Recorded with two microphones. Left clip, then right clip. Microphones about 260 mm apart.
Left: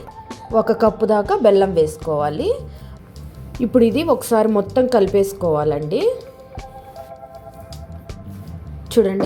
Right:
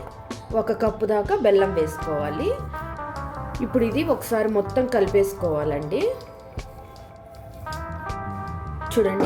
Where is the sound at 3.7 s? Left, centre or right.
Centre.